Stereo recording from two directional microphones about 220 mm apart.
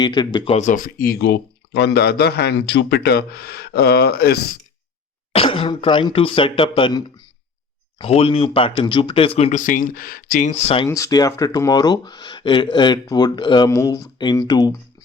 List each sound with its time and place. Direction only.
0.0 s speech: 20° left (ahead or behind); by 4.4 s 45° left (ahead or behind)
5.3 s speech: 25° left (ahead or behind)
10.8 s speech: 15° left (ahead or behind)